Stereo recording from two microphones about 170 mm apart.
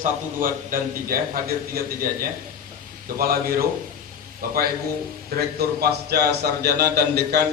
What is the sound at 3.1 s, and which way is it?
Speech, 60° right (ahead or behind).